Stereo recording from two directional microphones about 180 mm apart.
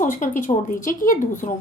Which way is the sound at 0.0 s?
45° left (ahead or behind).